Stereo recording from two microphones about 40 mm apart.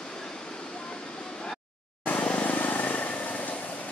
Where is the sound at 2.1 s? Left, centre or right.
Left.